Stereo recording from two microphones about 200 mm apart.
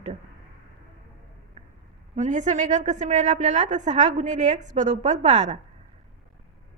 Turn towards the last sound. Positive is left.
turn(degrees=-35)  # may be behind; listen again after turning